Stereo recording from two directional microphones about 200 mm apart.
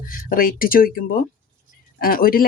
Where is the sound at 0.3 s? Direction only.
45° left (ahead or behind).